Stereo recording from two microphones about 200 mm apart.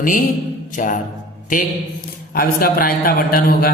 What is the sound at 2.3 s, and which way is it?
Mantra, 45° left (ahead or behind).